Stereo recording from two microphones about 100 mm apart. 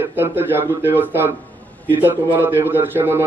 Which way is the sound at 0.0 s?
20° right (ahead or behind).